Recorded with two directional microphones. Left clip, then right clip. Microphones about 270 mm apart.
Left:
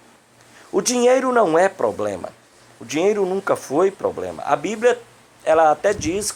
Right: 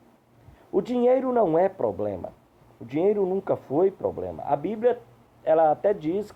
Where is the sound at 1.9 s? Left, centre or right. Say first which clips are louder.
Left 5 dB; left.